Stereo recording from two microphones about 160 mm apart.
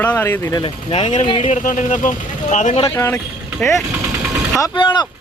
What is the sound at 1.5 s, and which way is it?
Speech, 55° left (ahead or behind).